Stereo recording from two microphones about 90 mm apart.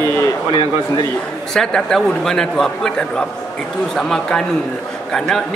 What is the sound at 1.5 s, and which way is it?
A man's voice, 5° left (ahead or behind).